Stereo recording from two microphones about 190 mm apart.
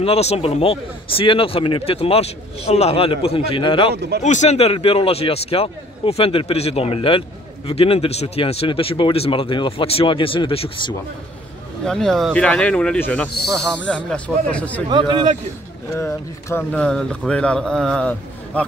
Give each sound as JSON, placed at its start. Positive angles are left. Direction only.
{"t": 0.0, "sound": "a man's voice", "side_deg": 35}
{"t": 3.9, "sound": "speech", "side_deg": -60}
{"t": 4.2, "sound": "a man's voice", "side_deg": 40}
{"t": 11.8, "sound": "speech", "side_deg": 0}
{"t": 14.9, "sound": "a man's voice", "side_deg": -25}
{"t": 15.9, "sound": "speech", "side_deg": 15}